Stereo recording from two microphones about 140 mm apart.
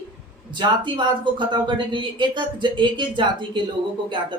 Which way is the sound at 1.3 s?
35° right (ahead or behind).